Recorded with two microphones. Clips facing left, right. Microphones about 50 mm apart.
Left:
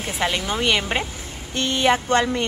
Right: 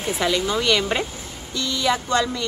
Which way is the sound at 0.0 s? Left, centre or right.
Left.